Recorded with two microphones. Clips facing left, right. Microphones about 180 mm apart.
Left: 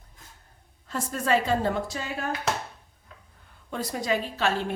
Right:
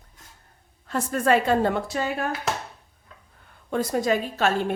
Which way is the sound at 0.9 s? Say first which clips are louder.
Right 4 dB; 60° right (ahead or behind).